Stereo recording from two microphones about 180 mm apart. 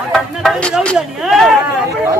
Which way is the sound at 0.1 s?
5° left (ahead or behind).